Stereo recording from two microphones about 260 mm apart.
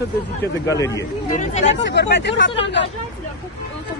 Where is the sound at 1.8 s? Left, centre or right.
Left.